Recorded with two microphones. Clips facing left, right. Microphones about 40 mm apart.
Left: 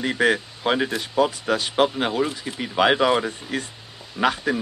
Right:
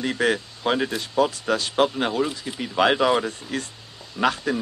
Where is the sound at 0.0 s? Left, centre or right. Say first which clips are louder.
Left 2 dB; left.